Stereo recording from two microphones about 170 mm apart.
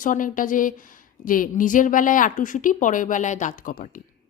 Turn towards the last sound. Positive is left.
turn(degrees=55)  # may be behind; listen again after turning